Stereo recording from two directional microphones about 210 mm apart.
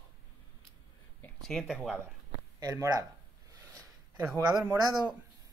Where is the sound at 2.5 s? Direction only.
15° right (ahead or behind).